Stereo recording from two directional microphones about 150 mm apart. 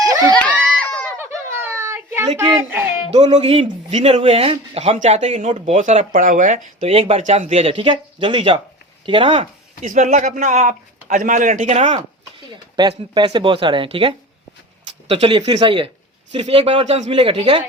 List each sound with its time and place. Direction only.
0.0 s a sound: 25° right (ahead or behind)
0.3 s a sound: 5° left (ahead or behind)
1.5 s a sound: 15° right (ahead or behind)
2.6 s speech: 15° right (ahead or behind)
3.3 s speech: 40° right (ahead or behind); by 6.6 s 60° right (ahead or behind)
6.8 s speech: 40° right (ahead or behind)
7.2 s speech: 55° right (ahead or behind); by 9.5 s 35° right (ahead or behind)
9.8 s speech: 55° right (ahead or behind)
12.5 s speech: 30° right (ahead or behind)